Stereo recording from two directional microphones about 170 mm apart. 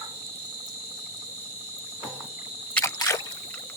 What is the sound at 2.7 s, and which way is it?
Single-lens reflex camera, 15° left (ahead or behind).